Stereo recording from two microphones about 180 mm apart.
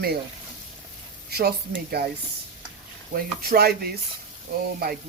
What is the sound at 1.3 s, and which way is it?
Speech, 65° right (ahead or behind).